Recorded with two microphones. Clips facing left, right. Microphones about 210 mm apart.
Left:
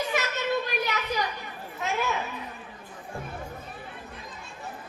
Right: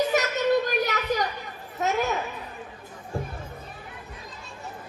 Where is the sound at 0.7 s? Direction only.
40° right (ahead or behind).